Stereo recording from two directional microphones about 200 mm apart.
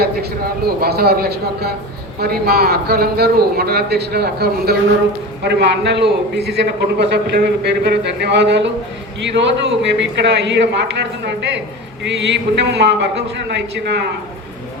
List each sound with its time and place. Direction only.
0.0 s a man's voice: 50° right (ahead or behind)